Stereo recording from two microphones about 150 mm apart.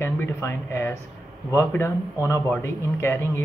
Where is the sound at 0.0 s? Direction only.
15° left (ahead or behind).